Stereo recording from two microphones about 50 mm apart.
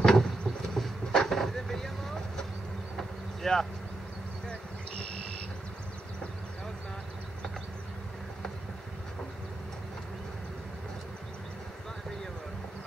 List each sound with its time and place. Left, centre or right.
0.0 s boat: centre
0.7 s vehicle: centre
4.5 s bee: left